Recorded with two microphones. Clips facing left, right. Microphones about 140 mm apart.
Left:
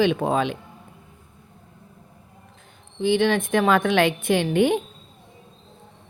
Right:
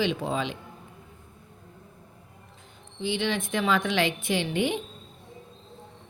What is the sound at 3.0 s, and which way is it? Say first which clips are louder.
Speech: left 8 dB; 50° left (ahead or behind).